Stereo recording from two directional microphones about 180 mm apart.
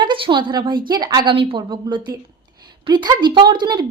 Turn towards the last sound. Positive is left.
turn(degrees=-25)  # may be behind; listen again after turning